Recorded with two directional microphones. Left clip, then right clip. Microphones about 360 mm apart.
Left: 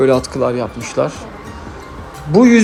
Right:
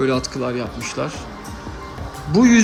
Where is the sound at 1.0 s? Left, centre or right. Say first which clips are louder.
Left 9 dB; left.